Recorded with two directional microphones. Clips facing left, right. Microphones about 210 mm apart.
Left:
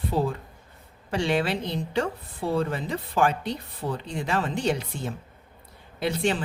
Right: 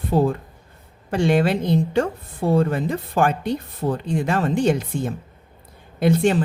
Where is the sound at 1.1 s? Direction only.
50° right (ahead or behind).